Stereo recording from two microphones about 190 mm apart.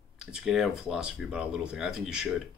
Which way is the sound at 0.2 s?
5° right (ahead or behind).